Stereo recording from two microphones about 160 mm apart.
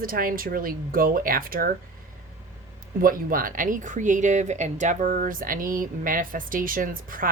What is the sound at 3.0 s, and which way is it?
Speech, 65° right (ahead or behind).